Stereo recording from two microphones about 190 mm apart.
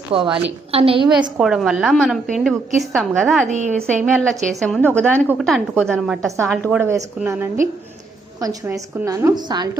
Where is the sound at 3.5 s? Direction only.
40° right (ahead or behind).